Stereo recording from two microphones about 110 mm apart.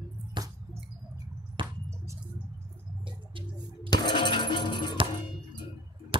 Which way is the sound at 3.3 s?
50° right (ahead or behind).